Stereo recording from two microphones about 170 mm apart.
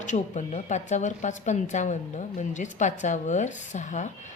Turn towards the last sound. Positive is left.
turn(degrees=45)  # may be behind; listen again after turning